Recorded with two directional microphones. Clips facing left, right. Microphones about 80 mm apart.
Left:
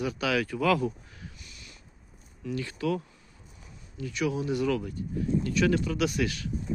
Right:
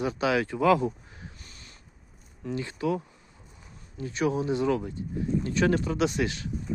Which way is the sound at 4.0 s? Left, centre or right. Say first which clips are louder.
Right 3 dB; right.